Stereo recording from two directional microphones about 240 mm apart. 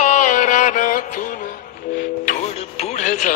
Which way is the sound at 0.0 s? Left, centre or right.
Left.